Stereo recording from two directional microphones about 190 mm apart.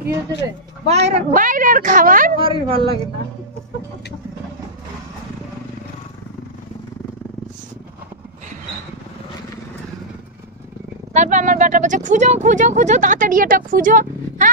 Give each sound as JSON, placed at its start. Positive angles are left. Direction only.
{"t": 0.8, "sound": "a woman's voice", "side_deg": -35}
{"t": 2.3, "sound": "a woman's voice", "side_deg": -25}
{"t": 11.1, "sound": "speech", "side_deg": -40}